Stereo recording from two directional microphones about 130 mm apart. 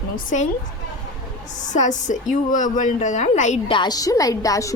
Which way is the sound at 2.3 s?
80° left.